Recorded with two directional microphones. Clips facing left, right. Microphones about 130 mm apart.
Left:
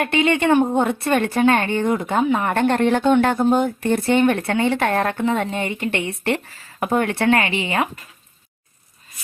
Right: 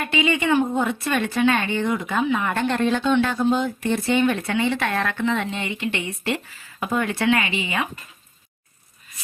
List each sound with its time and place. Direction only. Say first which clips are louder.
0.0 s a woman's voice: left 4 dB; 65° left (ahead or behind)
2.1 s a woman's voice: left 3 dB; 40° left (ahead or behind)
2.6 s speech: left 4 dB; 55° left (ahead or behind)